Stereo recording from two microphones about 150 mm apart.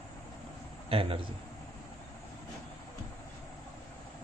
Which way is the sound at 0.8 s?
40° right (ahead or behind).